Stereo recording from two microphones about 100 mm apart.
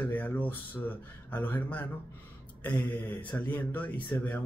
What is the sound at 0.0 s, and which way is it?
Speech, 15° left (ahead or behind).